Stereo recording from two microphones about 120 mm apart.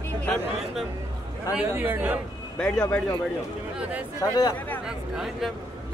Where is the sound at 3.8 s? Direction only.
10° right (ahead or behind).